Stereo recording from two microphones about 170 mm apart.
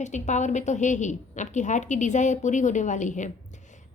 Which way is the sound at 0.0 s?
45° left (ahead or behind).